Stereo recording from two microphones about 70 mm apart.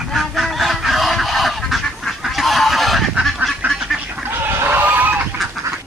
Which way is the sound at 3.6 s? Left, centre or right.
Right.